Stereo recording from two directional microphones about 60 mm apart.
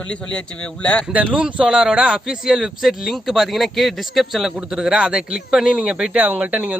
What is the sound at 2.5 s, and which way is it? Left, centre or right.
Speech, centre.